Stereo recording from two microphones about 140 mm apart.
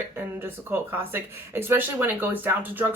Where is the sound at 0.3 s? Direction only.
15° right (ahead or behind).